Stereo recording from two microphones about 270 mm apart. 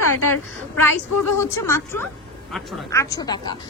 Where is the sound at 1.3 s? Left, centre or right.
Centre.